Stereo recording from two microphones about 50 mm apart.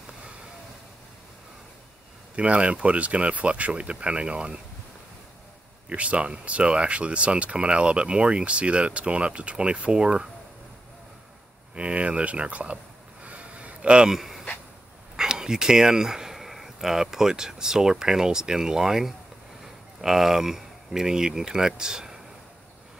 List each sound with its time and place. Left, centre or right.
2.3 s speech: right
5.9 s speech: right
11.7 s speech: right
13.2 s a sound: right
14.1 s speech: centre